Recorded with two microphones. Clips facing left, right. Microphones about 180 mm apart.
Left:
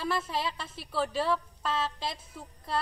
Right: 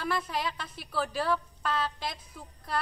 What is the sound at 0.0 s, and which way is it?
Speech, 25° left (ahead or behind).